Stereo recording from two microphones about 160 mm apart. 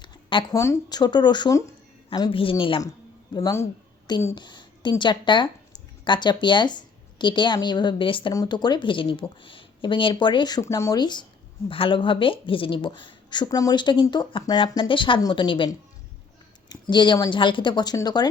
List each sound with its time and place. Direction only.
0.0 s a sound: 30° left (ahead or behind)
0.5 s speech: 20° left (ahead or behind)
3.3 s speech: 20° left (ahead or behind)